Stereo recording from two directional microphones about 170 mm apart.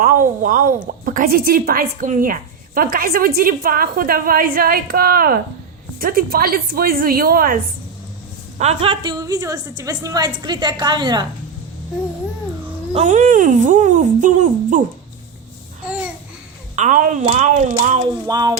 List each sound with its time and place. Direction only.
0.0 s a woman's voice: 55° right (ahead or behind)
8.5 s a woman's voice: 35° right (ahead or behind)
12.9 s speech: 45° right (ahead or behind)
16.7 s speech: 45° right (ahead or behind)
18.3 s a woman's voice: 20° right (ahead or behind)